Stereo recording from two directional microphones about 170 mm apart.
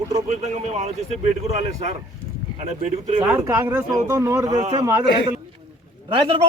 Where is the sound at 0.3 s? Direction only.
40° right (ahead or behind).